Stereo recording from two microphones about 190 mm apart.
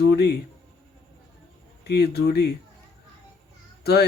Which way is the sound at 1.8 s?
60° left (ahead or behind).